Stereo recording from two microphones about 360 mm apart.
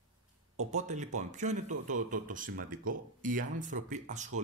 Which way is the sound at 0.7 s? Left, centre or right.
Centre.